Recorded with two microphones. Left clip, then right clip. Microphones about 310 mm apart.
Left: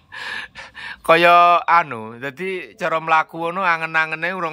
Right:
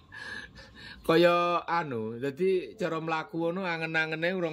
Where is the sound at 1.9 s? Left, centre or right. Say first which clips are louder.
Left 5 dB; left.